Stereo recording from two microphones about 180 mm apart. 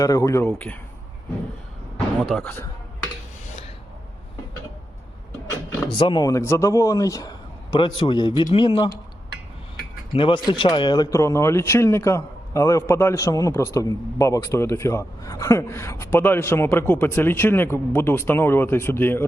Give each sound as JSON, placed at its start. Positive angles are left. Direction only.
{"t": 0.0, "sound": "speech", "side_deg": 20}
{"t": 2.4, "sound": "speech", "side_deg": 10}
{"t": 5.9, "sound": "a man's voice", "side_deg": 25}
{"t": 10.1, "sound": "speech", "side_deg": 25}